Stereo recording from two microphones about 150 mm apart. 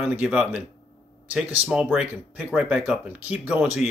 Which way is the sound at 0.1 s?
5° right (ahead or behind).